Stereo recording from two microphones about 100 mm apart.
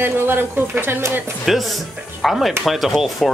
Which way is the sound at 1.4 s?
Centre (ahead or behind).